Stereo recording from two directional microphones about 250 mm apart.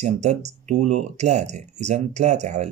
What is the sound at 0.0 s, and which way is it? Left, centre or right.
Speech, right.